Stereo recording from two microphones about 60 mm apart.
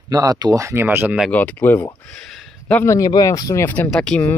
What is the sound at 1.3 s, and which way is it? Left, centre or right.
Speech, left.